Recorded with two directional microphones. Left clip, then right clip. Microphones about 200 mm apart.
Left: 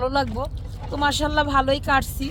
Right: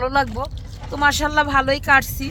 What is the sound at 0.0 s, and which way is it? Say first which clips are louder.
Speech: right 3 dB; 15° right (ahead or behind).